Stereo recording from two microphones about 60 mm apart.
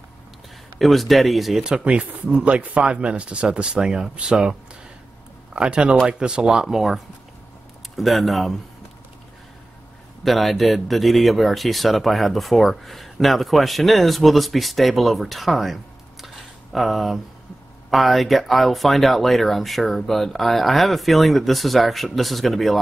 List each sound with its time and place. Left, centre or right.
0.7 s speech: centre
1.6 s speech: centre
10.2 s speech: centre